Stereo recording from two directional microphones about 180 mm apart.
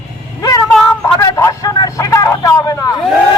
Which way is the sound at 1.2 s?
20° left (ahead or behind).